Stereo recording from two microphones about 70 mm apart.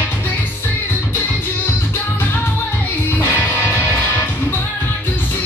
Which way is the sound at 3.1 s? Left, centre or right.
Left.